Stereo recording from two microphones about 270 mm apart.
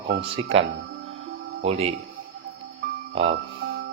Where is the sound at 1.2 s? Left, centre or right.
Right.